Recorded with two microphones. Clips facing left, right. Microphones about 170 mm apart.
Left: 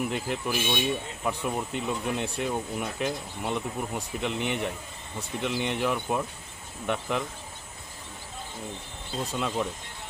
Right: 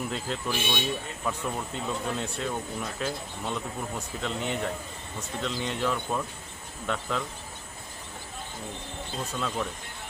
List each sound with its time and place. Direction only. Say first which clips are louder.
0.0 s speech: left 2 dB; 15° left (ahead or behind)
9.3 s speech: left 2 dB; 15° left (ahead or behind)